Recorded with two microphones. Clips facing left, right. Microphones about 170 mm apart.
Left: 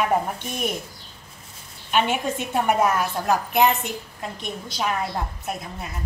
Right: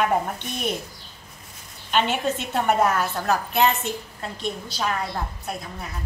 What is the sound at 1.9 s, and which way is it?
A woman's voice, 10° left (ahead or behind).